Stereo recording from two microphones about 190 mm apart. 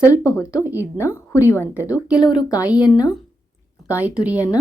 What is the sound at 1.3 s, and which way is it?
Speech, 15° left (ahead or behind).